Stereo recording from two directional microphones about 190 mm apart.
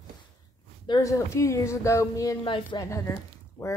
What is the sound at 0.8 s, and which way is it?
A woman's voice, 20° left (ahead or behind).